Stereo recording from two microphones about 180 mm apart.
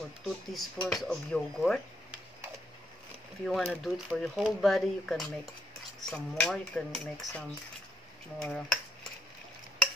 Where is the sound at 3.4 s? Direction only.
Centre (ahead or behind).